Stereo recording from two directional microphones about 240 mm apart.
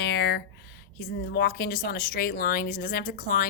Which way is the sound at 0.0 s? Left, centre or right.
Left.